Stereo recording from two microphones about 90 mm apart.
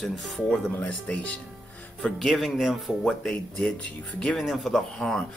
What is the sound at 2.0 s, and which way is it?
Speech, 5° left (ahead or behind).